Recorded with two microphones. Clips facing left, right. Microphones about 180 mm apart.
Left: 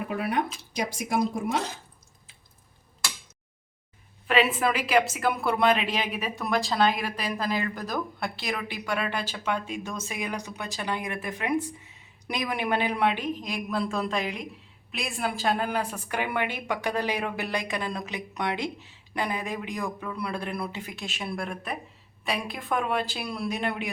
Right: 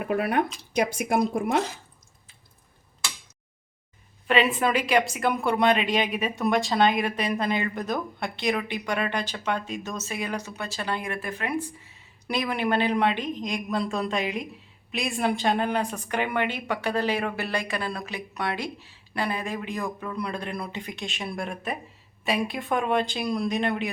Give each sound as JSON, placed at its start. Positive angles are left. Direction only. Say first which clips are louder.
{"t": 0.1, "sound": "speech", "louder": "right 5 dB", "side_deg": -60}
{"t": 4.3, "sound": "a woman's voice", "louder": "right 1 dB", "side_deg": 5}